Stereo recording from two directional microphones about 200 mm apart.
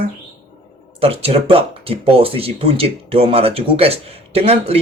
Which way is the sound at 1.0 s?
30° right (ahead or behind).